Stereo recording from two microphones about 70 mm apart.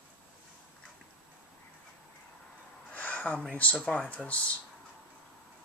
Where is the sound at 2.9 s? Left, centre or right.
Left.